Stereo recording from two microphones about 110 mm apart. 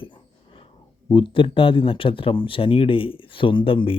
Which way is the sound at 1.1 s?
50° left (ahead or behind).